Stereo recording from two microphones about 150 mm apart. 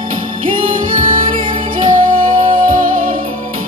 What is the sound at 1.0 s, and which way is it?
Music, 35° right (ahead or behind).